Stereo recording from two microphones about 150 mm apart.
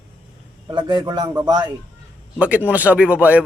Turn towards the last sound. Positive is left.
turn(degrees=-10)  # may be behind; listen again after turning